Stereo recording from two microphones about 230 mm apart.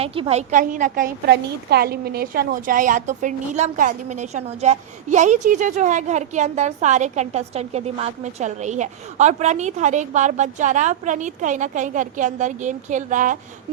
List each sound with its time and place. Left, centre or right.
0.0 s a woman's voice: right